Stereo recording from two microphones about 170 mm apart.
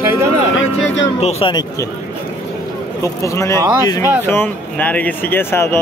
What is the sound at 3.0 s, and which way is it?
Speech, 20° left (ahead or behind).